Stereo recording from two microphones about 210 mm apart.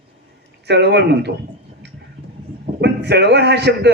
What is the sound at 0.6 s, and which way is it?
Speech, 55° right (ahead or behind).